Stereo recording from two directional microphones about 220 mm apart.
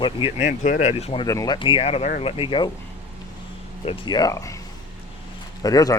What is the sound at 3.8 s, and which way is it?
Speech, 20° left (ahead or behind).